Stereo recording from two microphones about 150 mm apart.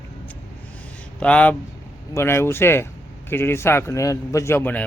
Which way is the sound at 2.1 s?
15° left (ahead or behind).